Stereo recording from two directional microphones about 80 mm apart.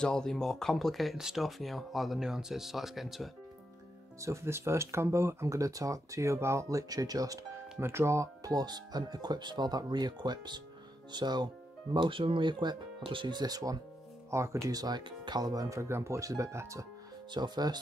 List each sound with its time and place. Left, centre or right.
0.0 s speech: centre
4.2 s speech: right
7.8 s speech: right
11.9 s speech: right
14.3 s speech: right
14.7 s speech: right
17.3 s speech: right